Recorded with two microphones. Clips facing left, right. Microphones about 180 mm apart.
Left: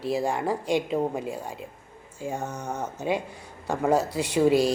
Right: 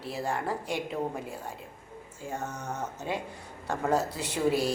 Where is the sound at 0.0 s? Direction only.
15° left (ahead or behind).